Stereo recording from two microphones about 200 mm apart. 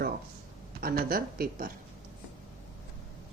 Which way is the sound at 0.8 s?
45° right (ahead or behind).